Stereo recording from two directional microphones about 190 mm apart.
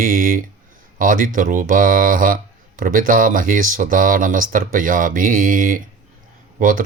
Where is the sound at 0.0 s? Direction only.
45° right (ahead or behind).